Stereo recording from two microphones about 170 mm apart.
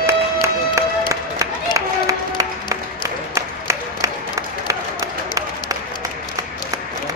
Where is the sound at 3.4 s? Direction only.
20° right (ahead or behind).